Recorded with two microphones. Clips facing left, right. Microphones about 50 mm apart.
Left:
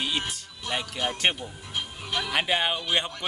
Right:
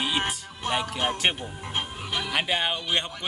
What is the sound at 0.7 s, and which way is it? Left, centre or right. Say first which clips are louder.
Speech: right 4 dB; right.